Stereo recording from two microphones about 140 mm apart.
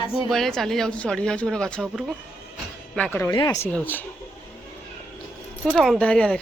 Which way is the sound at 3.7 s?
15° left (ahead or behind).